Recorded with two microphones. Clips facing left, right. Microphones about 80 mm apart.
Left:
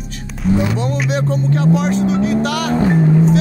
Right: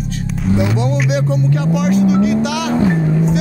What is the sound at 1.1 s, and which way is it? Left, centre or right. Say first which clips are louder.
Speech: right 1 dB; left.